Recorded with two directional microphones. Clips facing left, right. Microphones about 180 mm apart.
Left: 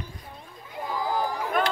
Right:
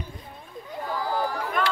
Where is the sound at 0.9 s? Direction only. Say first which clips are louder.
Even; 15° left (ahead or behind).